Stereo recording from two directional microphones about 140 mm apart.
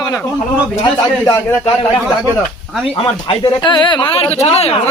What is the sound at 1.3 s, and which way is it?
Speech, 30° left (ahead or behind).